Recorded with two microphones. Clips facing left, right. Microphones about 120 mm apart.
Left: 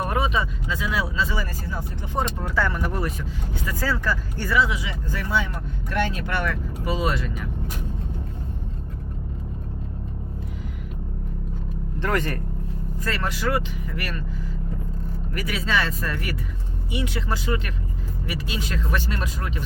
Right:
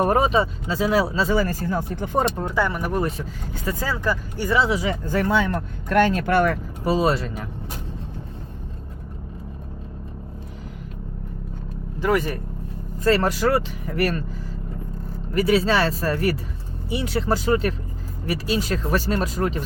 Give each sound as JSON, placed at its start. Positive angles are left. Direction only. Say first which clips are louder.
{"t": 0.0, "sound": "speech", "louder": "right 6 dB", "side_deg": -40}
{"t": 2.4, "sound": "speech", "louder": "right 2 dB", "side_deg": -15}
{"t": 4.5, "sound": "speech", "louder": "right 2 dB", "side_deg": -30}
{"t": 4.8, "sound": "speech", "louder": "right 8 dB", "side_deg": -45}
{"t": 11.9, "sound": "speech", "louder": "right 4 dB", "side_deg": -10}
{"t": 13.0, "sound": "speech", "louder": "right 9 dB", "side_deg": -30}
{"t": 15.3, "sound": "speech", "louder": "right 8 dB", "side_deg": -30}